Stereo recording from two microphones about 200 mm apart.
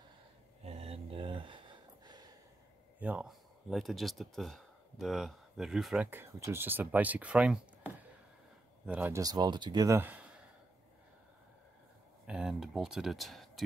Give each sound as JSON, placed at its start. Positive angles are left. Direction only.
{"t": 0.7, "sound": "a sound", "side_deg": -30}
{"t": 2.0, "sound": "gasp", "side_deg": -20}
{"t": 3.0, "sound": "speech", "side_deg": -5}
{"t": 12.3, "sound": "speech", "side_deg": -5}